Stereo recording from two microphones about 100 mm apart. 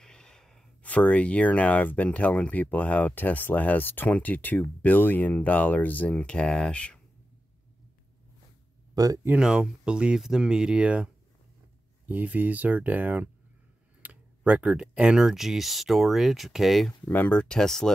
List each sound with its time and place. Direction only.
0.0 s sigh: 5° left (ahead or behind)
0.8 s speech: 15° left (ahead or behind)
8.9 s speech: 35° right (ahead or behind)
9.4 s speech: 5° right (ahead or behind)
12.1 s speech: 15° right (ahead or behind); by 16.9 s centre (ahead or behind)
17.0 s speech: 15° left (ahead or behind)